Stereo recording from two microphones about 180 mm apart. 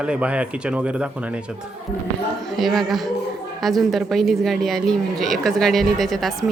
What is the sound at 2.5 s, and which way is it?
A woman's voice, centre (ahead or behind).